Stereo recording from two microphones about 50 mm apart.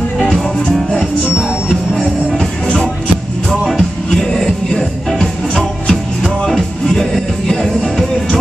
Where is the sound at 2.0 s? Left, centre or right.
Centre.